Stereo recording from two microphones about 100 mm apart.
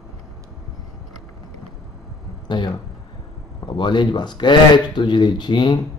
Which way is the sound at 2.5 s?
50° left (ahead or behind).